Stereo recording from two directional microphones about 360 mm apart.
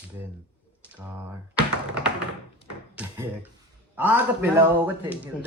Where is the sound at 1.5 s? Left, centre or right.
Centre.